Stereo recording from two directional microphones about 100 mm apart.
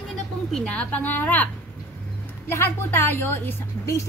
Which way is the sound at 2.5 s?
25° left (ahead or behind).